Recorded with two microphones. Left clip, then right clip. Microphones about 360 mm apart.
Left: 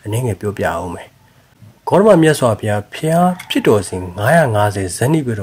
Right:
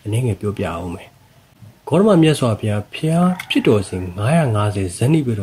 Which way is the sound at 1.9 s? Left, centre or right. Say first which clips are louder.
Left 4 dB; centre.